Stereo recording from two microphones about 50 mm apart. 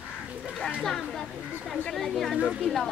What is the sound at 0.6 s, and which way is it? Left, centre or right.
A child's voice, centre.